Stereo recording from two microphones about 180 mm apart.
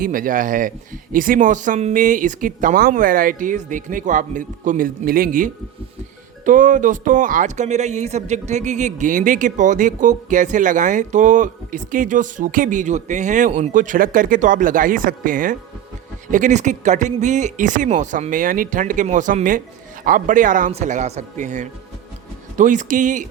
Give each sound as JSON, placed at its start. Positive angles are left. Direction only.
{"t": 0.0, "sound": "speech", "side_deg": -50}